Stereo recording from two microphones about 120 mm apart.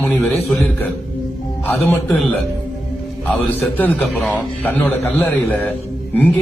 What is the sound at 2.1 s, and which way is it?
Speech, 15° left (ahead or behind).